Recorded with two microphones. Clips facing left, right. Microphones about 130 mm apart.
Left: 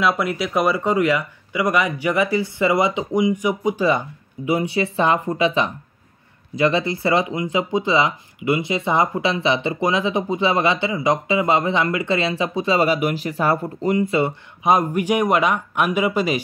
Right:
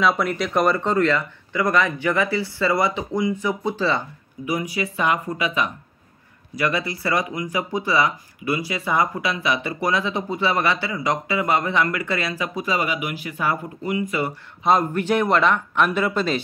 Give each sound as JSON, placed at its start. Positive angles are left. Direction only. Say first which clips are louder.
{"t": 0.0, "sound": "speech", "louder": "even", "side_deg": 5}
{"t": 4.5, "sound": "speech", "louder": "left 5 dB", "side_deg": 30}
{"t": 14.1, "sound": "speech", "louder": "left 5 dB", "side_deg": 20}